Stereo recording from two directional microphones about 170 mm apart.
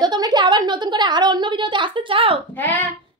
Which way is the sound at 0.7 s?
25° right (ahead or behind).